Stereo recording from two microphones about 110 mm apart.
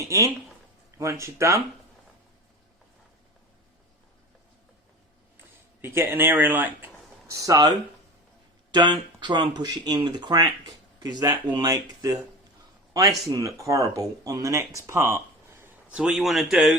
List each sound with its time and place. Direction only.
0.9 s speech: 30° right (ahead or behind)
5.8 s speech: 20° right (ahead or behind)
6.8 s a sound: 30° right (ahead or behind)
8.7 s speech: 40° right (ahead or behind); by 15.7 s 25° right (ahead or behind)
15.9 s speech: 10° right (ahead or behind)